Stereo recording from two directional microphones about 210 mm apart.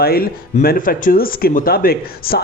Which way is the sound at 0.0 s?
45° left (ahead or behind).